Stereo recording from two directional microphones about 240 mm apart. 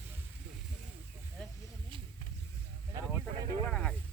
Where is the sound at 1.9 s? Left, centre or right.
Right.